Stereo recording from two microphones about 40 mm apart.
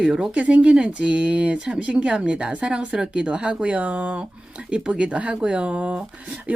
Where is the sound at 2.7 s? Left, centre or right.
Centre.